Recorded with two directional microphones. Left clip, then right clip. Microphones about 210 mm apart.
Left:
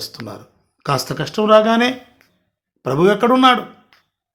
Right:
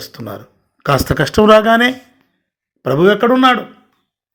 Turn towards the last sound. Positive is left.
turn(degrees=-5)  # may be behind; listen again after turning